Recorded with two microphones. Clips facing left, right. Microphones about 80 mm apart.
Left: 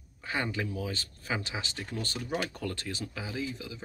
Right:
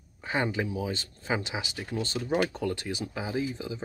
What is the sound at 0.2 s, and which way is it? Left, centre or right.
Speech, right.